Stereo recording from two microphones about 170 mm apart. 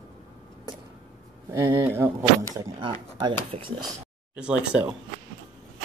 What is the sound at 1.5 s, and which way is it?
Speech, 15° right (ahead or behind).